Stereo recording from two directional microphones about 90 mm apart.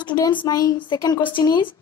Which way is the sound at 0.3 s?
60° left (ahead or behind).